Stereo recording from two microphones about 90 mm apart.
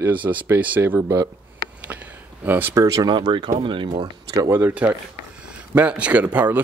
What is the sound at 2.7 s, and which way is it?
Speech, 40° right (ahead or behind).